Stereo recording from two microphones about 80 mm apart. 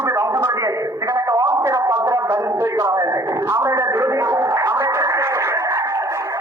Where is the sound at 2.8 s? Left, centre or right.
Right.